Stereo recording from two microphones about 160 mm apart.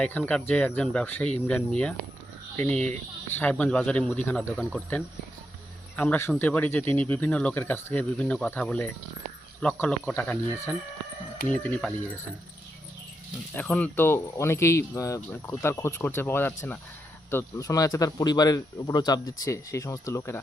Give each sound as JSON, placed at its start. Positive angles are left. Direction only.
{"t": 0.0, "sound": "speech", "side_deg": 10}
{"t": 13.6, "sound": "speech", "side_deg": 10}